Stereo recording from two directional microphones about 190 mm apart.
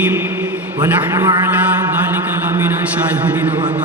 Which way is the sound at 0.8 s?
20° right (ahead or behind).